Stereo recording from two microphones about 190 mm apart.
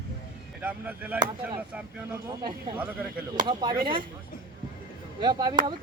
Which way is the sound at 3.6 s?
25° right (ahead or behind).